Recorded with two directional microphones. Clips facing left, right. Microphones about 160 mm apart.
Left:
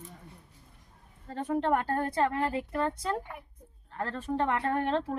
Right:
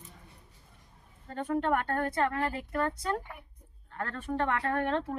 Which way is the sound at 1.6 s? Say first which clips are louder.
Left 2 dB; 30° left (ahead or behind).